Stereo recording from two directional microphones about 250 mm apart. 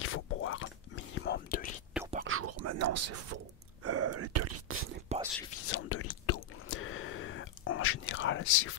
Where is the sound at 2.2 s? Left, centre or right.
Right.